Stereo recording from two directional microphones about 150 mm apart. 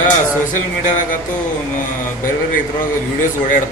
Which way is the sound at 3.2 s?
60° left (ahead or behind).